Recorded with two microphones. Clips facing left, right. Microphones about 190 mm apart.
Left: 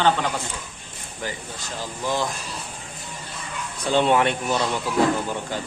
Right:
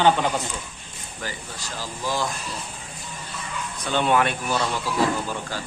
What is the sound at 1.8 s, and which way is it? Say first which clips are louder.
Speech: left 2 dB; 20° left (ahead or behind).